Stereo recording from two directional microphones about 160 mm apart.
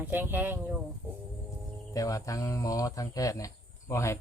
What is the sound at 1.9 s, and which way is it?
Speech, 20° left (ahead or behind).